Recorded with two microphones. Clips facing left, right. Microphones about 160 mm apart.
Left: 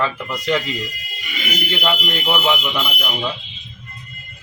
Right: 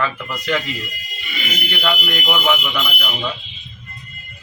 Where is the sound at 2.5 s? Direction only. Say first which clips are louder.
Even; 15° left (ahead or behind).